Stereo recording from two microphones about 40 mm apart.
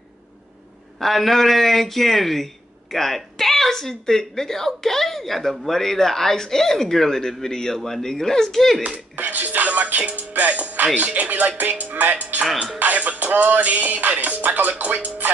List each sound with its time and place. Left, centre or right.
0.9 s a man's voice: centre
8.9 s music: right
12.7 s speech: right
13.3 s music: right